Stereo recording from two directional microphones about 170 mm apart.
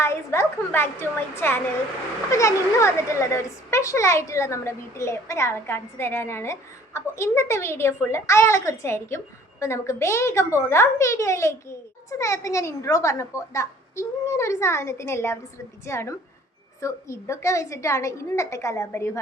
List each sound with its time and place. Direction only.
0.0 s speech: 15° left (ahead or behind)